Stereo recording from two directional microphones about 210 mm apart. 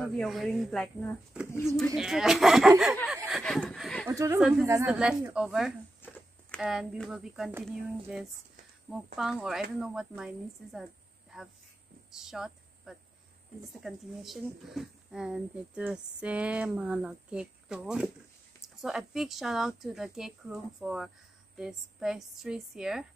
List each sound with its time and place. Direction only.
0.0 s speech: centre (ahead or behind)
3.1 s a sound: centre (ahead or behind)
4.1 s speech: 15° right (ahead or behind)
4.4 s speech: centre (ahead or behind)
4.6 s speech: 15° right (ahead or behind)